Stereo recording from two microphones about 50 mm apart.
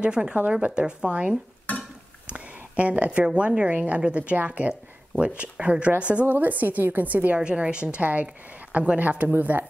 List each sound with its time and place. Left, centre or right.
0.0 s speech: centre
1.7 s a sound: left
2.2 s a sound: right
3.3 s speech: right
6.2 s a woman's voice: right
7.3 s a woman's voice: right